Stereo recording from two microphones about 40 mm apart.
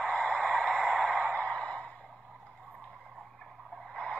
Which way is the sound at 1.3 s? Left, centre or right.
Left.